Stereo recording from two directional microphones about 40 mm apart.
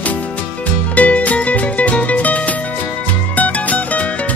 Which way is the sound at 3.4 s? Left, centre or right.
Left.